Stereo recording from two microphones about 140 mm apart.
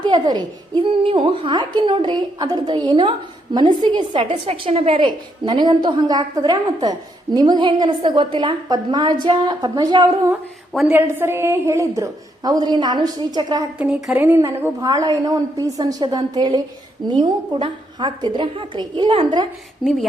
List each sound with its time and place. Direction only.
0.0 s a child's voice: 30° right (ahead or behind)
5.0 s a woman's voice: 30° right (ahead or behind)
10.7 s a woman's voice: centre (ahead or behind)
10.9 s a woman's voice: 15° right (ahead or behind)
13.7 s a woman's voice: 10° right (ahead or behind); by 19.5 s 35° right (ahead or behind)
19.8 s speech: centre (ahead or behind)